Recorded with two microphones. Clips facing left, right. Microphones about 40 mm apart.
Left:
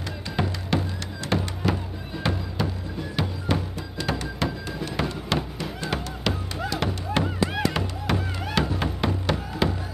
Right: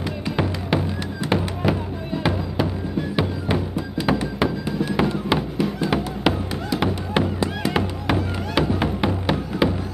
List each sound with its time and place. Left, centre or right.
0.4 s music: centre